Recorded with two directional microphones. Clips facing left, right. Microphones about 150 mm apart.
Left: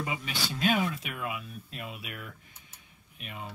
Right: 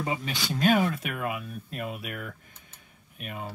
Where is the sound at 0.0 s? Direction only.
40° right (ahead or behind).